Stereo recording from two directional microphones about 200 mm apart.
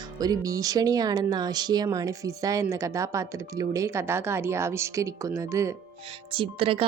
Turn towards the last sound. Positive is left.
turn(degrees=-25)  # may be behind; listen again after turning